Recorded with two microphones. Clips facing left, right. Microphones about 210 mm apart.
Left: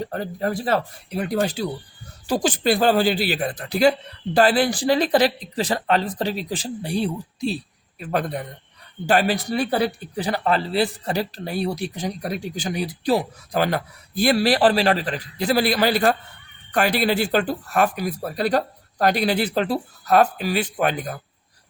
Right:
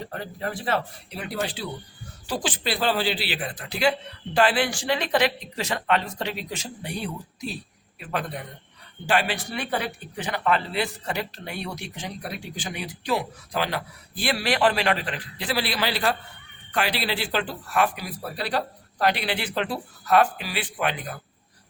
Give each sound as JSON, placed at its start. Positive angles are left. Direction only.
{"t": 0.0, "sound": "speech", "side_deg": 40}